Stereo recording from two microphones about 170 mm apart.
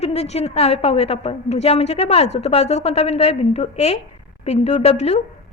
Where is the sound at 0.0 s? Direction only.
40° left (ahead or behind).